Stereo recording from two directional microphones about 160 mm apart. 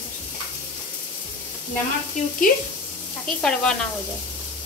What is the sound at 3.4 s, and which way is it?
Speech, 5° left (ahead or behind).